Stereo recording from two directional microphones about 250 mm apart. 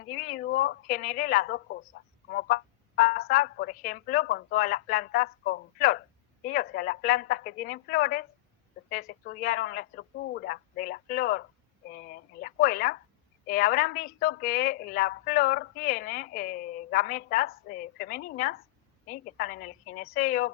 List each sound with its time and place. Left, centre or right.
0.2 s a woman's voice: left